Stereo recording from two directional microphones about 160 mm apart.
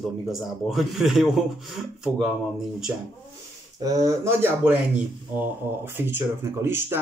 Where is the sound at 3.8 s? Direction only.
20° right (ahead or behind).